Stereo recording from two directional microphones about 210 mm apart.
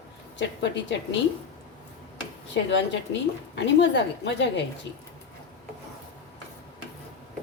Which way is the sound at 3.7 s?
55° left (ahead or behind).